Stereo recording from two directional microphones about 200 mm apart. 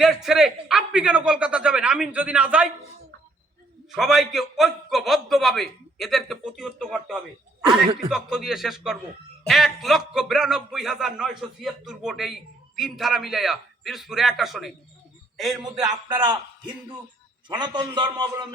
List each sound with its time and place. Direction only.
0.0 s a man's voice: centre (ahead or behind)
3.9 s a man's voice: centre (ahead or behind)
8.1 s a man's voice: centre (ahead or behind)
15.6 s a man's voice: 20° right (ahead or behind)